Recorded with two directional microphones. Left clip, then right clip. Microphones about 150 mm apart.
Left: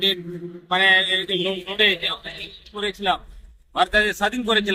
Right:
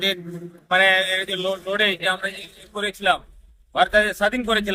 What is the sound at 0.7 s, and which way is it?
A man's voice, 40° right (ahead or behind).